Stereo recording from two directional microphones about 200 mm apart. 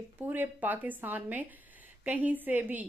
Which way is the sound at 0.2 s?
10° right (ahead or behind).